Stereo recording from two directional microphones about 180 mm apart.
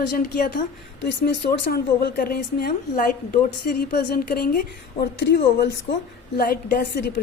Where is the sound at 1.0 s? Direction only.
70° left (ahead or behind).